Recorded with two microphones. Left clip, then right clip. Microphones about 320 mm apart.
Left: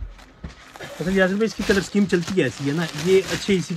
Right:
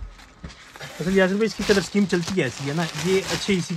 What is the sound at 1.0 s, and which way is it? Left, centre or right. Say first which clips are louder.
Speech: even; centre.